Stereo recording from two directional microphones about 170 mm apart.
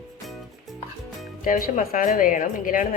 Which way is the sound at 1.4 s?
55° left (ahead or behind).